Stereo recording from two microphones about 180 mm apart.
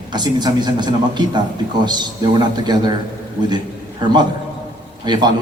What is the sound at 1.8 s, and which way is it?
A man's voice, 25° right (ahead or behind).